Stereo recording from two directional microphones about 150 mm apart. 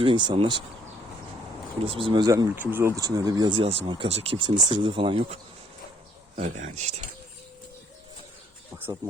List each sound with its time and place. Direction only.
0.0 s speech: 35° right (ahead or behind)
1.8 s speech: 35° right (ahead or behind)
2.6 s speech: 15° right (ahead or behind); by 5.4 s 35° right (ahead or behind)
6.3 s speech: 50° right (ahead or behind)